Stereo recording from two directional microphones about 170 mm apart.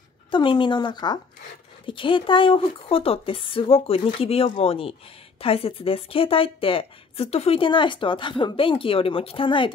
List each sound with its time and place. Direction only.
0.3 s speech: 30° left (ahead or behind)